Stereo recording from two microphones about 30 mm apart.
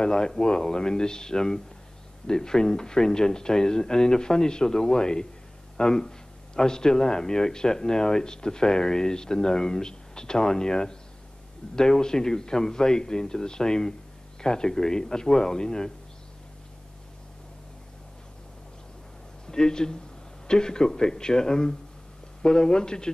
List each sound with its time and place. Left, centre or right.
0.0 s a man's voice: left
19.4 s a man's voice: left